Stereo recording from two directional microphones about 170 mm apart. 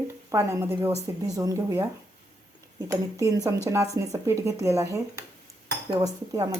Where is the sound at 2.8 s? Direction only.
20° right (ahead or behind).